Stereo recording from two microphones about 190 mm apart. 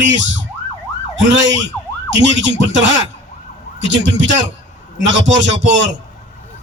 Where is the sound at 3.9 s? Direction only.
70° right (ahead or behind).